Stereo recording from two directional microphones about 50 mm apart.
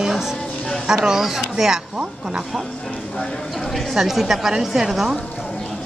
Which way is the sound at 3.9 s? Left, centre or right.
Centre.